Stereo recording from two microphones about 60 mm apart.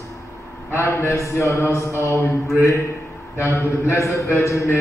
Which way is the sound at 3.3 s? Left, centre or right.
Left.